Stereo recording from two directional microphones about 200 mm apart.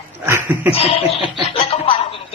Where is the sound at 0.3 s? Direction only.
10° right (ahead or behind).